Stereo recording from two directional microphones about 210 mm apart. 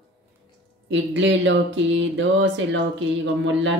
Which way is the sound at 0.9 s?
60° right (ahead or behind).